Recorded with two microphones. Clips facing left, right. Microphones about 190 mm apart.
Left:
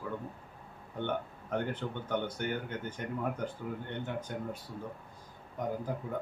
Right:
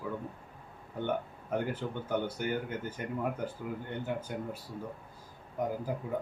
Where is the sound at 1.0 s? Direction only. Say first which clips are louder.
Right 2 dB; 5° right (ahead or behind).